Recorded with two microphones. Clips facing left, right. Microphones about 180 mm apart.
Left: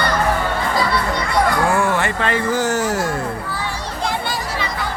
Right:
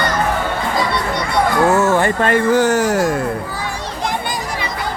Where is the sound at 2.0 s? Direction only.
50° right (ahead or behind).